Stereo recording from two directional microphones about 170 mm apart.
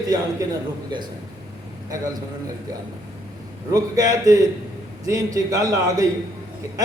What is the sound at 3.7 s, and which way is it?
A man's voice, 20° right (ahead or behind).